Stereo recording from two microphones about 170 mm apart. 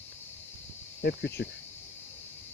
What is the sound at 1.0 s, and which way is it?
Speech, 80° left.